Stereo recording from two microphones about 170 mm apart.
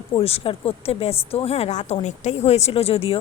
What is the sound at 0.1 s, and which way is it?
A woman's voice, 35° left (ahead or behind).